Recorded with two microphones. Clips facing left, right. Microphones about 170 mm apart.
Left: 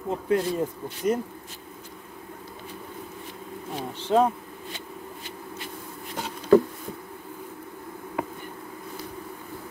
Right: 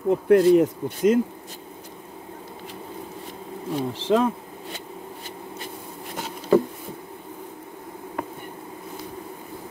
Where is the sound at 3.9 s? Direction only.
90° right.